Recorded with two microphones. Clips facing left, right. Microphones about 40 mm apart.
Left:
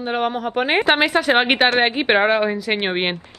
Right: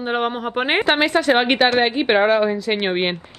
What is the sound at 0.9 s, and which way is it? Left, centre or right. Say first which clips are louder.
A woman's voice: right 1 dB; centre.